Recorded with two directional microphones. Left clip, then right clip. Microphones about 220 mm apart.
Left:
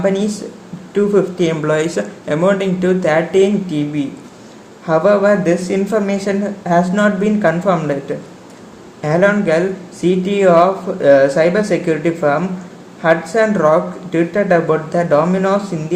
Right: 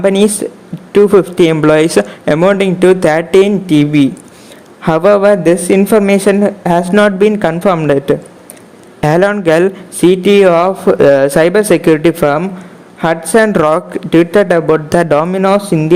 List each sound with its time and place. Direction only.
0.0 s a woman's voice: 40° right (ahead or behind)